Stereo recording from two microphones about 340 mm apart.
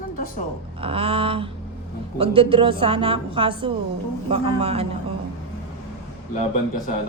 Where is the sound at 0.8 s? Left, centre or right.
Centre.